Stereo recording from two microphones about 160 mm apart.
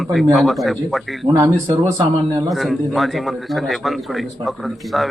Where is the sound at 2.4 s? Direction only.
Centre (ahead or behind).